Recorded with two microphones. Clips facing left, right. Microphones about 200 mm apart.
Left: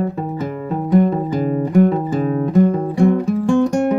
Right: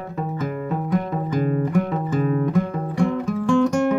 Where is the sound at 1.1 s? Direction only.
30° left (ahead or behind).